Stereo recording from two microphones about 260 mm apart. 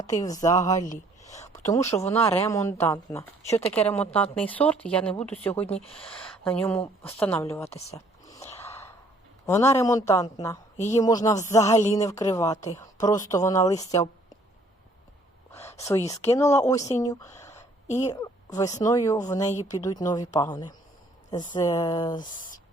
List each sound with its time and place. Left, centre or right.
0.2 s speech: centre
5.6 s speech: left
6.1 s speech: centre
7.9 s a sound: centre
9.5 s speech: centre
15.8 s speech: centre